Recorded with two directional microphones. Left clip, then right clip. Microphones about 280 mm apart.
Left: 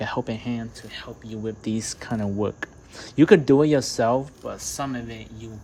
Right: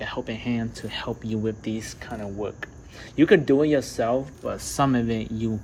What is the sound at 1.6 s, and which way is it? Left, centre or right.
Speech, centre.